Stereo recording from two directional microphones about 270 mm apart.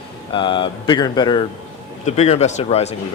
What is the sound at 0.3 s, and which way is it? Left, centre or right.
Speech, centre.